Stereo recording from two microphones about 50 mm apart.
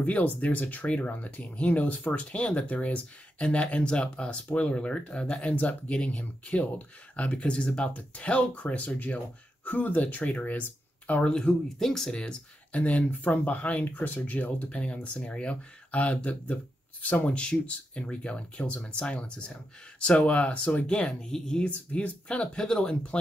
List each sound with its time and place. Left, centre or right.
0.0 s speech: left
3.3 s speech: centre; by 11.2 s left
11.2 s speech: centre
12.7 s speech: left
21.6 s speech: left